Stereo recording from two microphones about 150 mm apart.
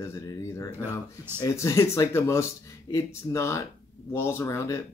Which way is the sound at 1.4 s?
20° left (ahead or behind).